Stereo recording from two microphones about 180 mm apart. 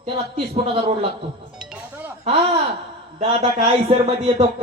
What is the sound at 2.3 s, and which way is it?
A man's voice, 30° right (ahead or behind).